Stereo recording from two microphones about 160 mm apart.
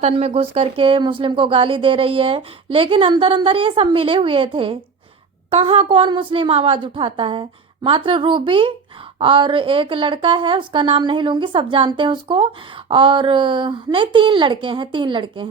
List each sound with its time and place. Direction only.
0.0 s a woman's voice: 40° right (ahead or behind)